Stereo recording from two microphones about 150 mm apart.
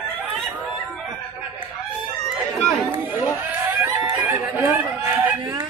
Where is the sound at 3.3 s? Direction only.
15° right (ahead or behind).